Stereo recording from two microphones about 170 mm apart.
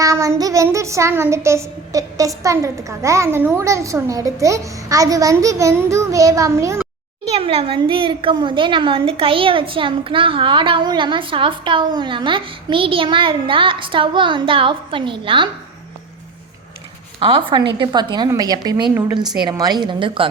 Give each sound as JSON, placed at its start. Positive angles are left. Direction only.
{"t": 0.0, "sound": "child singing", "side_deg": -20}
{"t": 7.3, "sound": "a woman's voice", "side_deg": -35}
{"t": 17.2, "sound": "a woman's voice", "side_deg": -30}